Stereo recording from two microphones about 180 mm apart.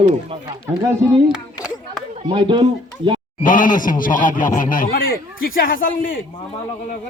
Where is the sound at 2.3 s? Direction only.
25° right (ahead or behind).